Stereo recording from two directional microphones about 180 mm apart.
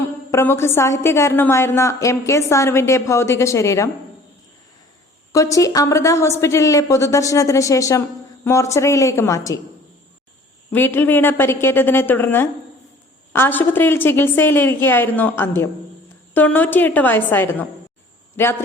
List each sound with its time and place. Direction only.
0.3 s a woman's voice: 15° left (ahead or behind)
5.3 s a woman's voice: 15° left (ahead or behind)
10.7 s a woman's voice: 10° left (ahead or behind)